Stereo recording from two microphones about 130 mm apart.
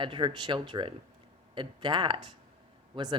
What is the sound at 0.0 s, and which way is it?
Speech, 40° right (ahead or behind).